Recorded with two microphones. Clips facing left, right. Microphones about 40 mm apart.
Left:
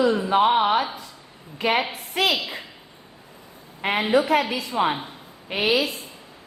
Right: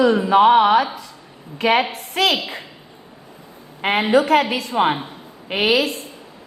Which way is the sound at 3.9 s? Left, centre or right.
Right.